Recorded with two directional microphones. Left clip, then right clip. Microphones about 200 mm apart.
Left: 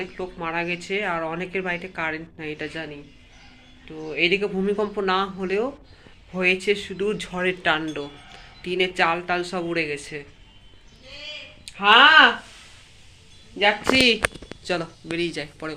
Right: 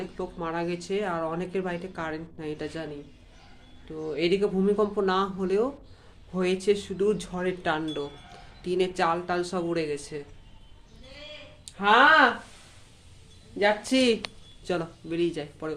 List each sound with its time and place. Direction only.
0.0 s speech: 5° right (ahead or behind)
3.9 s speech: 10° right (ahead or behind)
11.6 s speech: 10° right (ahead or behind)
13.6 s speech: 10° right (ahead or behind)